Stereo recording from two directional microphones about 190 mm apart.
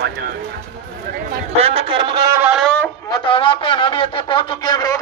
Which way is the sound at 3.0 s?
25° left (ahead or behind).